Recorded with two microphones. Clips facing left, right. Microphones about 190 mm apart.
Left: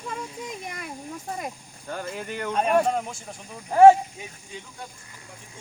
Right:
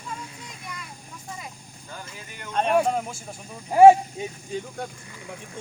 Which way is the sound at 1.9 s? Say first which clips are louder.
Left 10 dB; 55° left (ahead or behind).